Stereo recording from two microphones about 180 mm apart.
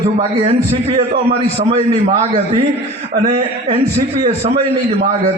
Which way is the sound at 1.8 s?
35° right (ahead or behind).